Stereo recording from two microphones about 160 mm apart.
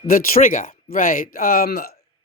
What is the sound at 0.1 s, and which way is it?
Speech, 60° left (ahead or behind).